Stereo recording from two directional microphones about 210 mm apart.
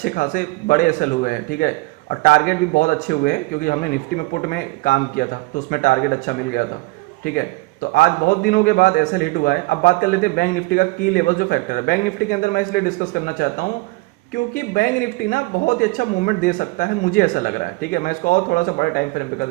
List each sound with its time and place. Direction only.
0.0 s a man's voice: 40° left (ahead or behind)
14.8 s speech: 40° left (ahead or behind)